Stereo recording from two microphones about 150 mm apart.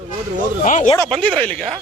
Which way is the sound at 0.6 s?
55° left (ahead or behind).